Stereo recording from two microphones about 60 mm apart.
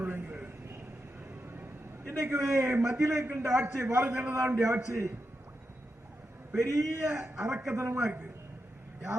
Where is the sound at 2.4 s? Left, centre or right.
Right.